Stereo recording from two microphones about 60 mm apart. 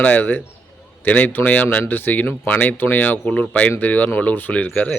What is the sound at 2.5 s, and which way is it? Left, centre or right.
Speech, left.